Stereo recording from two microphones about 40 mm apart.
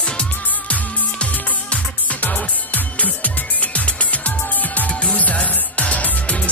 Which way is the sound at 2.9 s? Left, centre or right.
Left.